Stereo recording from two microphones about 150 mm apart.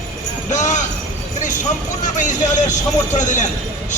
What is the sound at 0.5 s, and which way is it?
Speech, 55° left (ahead or behind).